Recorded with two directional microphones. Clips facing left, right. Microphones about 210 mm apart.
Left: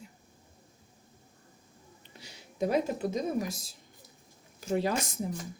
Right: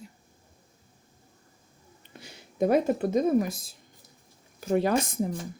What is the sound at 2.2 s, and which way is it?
A woman's voice, 55° right (ahead or behind).